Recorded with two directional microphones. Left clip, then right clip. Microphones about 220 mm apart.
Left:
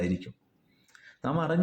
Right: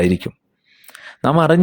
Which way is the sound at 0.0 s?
45° right (ahead or behind).